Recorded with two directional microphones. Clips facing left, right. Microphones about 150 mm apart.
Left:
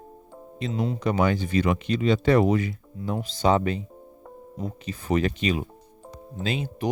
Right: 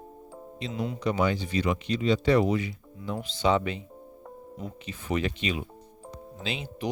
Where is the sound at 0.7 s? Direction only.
35° left (ahead or behind).